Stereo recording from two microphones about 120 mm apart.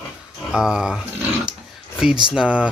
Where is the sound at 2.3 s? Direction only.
5° right (ahead or behind).